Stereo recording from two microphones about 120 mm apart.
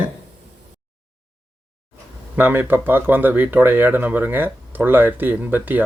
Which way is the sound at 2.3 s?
15° right (ahead or behind).